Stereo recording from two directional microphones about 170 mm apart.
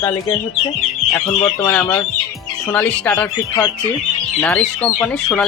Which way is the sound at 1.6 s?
10° left (ahead or behind).